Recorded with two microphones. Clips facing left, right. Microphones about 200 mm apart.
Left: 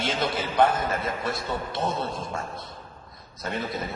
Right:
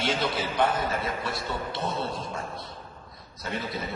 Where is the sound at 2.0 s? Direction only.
45° left (ahead or behind).